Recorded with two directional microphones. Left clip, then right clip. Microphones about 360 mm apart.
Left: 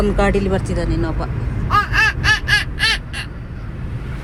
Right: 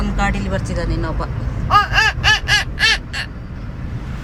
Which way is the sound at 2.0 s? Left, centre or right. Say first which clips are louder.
Right 1 dB; centre.